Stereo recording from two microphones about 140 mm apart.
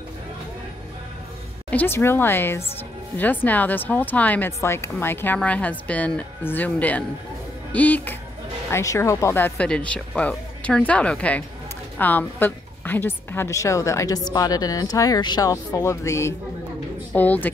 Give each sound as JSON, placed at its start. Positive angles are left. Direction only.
{"t": 1.7, "sound": "a woman's voice", "side_deg": 15}